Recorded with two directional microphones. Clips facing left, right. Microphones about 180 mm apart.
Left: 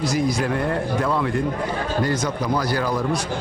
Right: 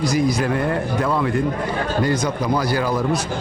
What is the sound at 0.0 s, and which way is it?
Speech, centre (ahead or behind).